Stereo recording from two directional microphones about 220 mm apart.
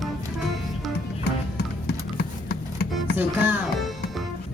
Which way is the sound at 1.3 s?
45° left (ahead or behind).